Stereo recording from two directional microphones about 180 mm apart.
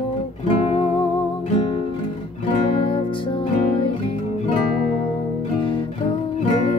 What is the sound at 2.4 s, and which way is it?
Music, 30° left (ahead or behind).